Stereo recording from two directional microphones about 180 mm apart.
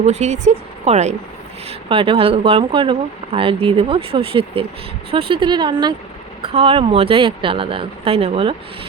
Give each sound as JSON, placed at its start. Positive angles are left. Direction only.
{"t": 0.0, "sound": "speech", "side_deg": -40}